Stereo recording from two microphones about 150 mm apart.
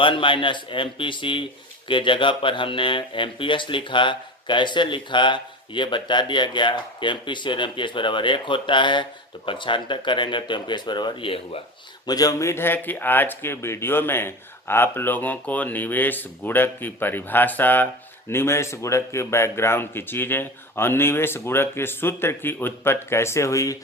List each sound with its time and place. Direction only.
0.0 s speech: 35° left (ahead or behind)
12.0 s speech: 25° left (ahead or behind)